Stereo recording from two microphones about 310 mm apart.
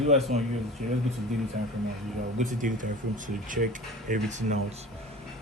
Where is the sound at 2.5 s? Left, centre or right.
Right.